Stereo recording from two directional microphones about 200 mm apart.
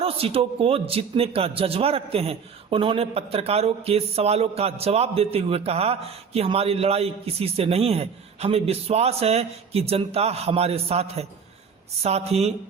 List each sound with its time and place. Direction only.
0.0 s a woman's voice: 30° right (ahead or behind)